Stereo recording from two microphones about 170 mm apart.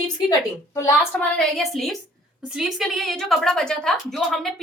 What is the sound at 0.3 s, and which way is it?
Speech, 20° left (ahead or behind).